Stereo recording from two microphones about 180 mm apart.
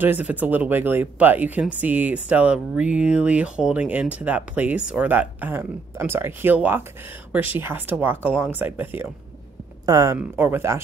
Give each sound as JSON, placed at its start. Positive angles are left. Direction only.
{"t": 0.0, "sound": "speech", "side_deg": -10}